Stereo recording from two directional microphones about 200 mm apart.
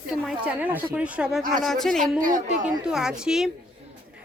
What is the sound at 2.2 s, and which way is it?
Speech, 40° right (ahead or behind).